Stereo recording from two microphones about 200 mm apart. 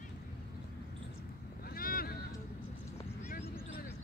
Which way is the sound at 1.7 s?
45° left (ahead or behind).